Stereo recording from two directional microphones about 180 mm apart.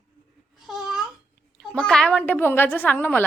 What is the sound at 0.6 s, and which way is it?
Babbling, centre (ahead or behind).